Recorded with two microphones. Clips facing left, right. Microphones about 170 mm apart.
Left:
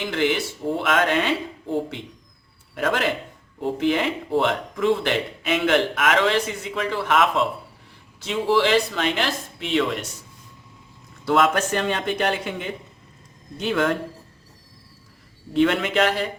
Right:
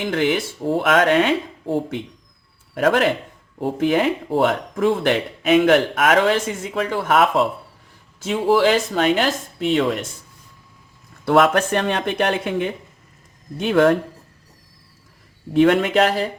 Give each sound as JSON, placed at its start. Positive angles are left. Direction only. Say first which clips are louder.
{"t": 0.1, "sound": "speech", "louder": "right 2 dB", "side_deg": -50}
{"t": 2.7, "sound": "speech", "louder": "right 6 dB", "side_deg": -55}
{"t": 11.3, "sound": "speech", "louder": "right 4 dB", "side_deg": -55}
{"t": 15.5, "sound": "speech", "louder": "right 5 dB", "side_deg": -50}